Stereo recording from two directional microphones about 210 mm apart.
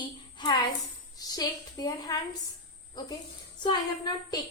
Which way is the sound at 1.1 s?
15° left (ahead or behind).